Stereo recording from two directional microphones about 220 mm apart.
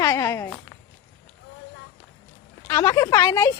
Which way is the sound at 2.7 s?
15° left (ahead or behind).